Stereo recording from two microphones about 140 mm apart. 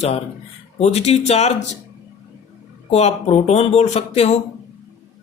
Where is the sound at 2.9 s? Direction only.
50° left (ahead or behind).